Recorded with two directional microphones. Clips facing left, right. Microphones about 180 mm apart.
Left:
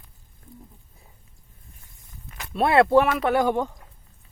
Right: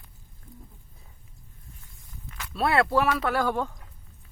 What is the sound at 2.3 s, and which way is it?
Speech, 25° left (ahead or behind).